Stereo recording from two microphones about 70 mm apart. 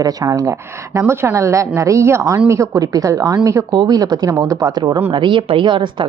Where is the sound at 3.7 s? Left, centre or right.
Right.